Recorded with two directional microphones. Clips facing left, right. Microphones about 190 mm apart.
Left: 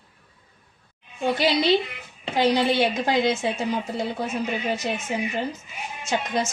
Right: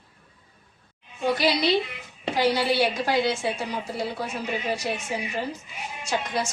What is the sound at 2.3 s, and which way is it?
A woman's voice, 20° left (ahead or behind).